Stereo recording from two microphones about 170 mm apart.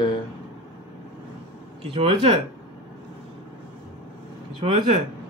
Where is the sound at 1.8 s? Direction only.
30° right (ahead or behind).